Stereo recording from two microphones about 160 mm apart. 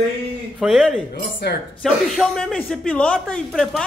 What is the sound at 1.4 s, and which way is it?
Speech, 90° left.